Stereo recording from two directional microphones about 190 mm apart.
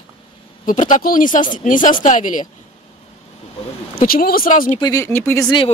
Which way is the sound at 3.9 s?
50° left (ahead or behind).